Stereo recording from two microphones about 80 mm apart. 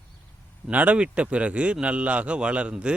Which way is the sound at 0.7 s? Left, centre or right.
Centre.